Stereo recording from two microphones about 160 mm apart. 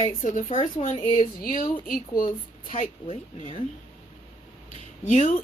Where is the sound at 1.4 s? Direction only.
60° left (ahead or behind).